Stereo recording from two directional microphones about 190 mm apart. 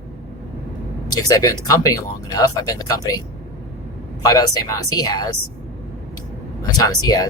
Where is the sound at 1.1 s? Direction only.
20° left (ahead or behind).